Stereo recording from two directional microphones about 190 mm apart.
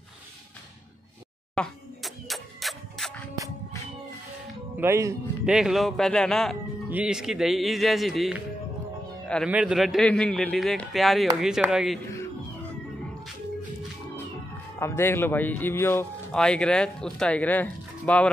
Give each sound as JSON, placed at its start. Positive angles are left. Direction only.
{"t": 1.5, "sound": "music", "side_deg": 0}
{"t": 4.7, "sound": "speech", "side_deg": -15}
{"t": 5.4, "sound": "speech", "side_deg": -5}
{"t": 9.5, "sound": "speech", "side_deg": -5}
{"t": 14.8, "sound": "speech", "side_deg": 15}